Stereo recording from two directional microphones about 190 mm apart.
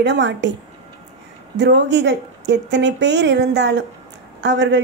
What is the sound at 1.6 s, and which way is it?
Speech, 65° right (ahead or behind).